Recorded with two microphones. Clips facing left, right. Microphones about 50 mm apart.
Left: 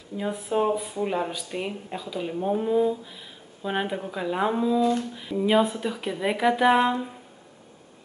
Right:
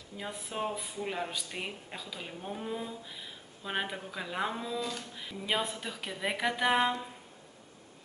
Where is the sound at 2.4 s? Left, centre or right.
Left.